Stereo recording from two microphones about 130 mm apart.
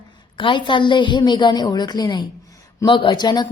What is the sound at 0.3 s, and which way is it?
A woman's voice, 40° left (ahead or behind).